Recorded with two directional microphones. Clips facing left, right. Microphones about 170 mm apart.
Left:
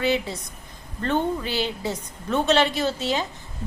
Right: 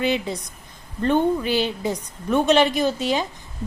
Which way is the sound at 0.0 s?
20° right (ahead or behind).